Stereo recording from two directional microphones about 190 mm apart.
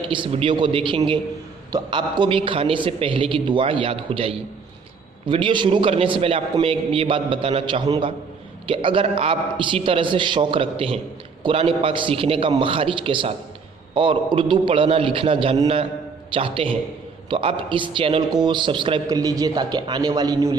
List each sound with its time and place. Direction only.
0.1 s a man's voice: 25° right (ahead or behind)